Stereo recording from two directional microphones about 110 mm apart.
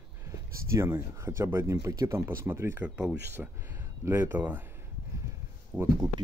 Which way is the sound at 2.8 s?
10° right (ahead or behind).